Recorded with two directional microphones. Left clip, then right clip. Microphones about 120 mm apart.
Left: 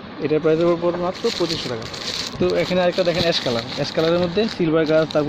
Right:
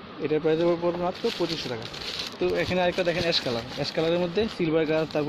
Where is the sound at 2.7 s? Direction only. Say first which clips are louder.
Left 6 dB; 20° right (ahead or behind).